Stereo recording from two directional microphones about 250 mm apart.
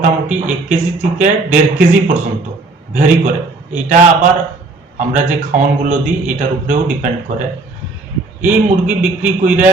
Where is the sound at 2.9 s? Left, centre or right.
Right.